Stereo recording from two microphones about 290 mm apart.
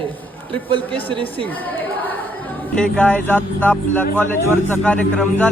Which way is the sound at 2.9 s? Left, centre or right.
Centre.